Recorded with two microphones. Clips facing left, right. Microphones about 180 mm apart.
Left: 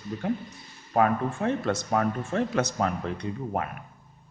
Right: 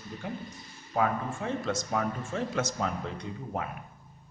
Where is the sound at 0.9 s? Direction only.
60° left (ahead or behind).